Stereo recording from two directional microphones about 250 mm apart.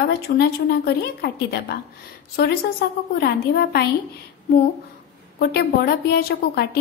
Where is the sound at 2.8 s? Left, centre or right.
Left.